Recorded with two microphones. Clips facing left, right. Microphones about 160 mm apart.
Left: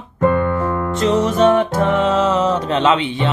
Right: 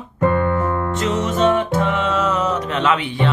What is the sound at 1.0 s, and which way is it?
Music, 40° left (ahead or behind).